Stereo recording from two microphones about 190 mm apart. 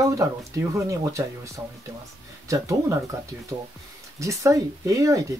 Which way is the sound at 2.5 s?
15° right (ahead or behind).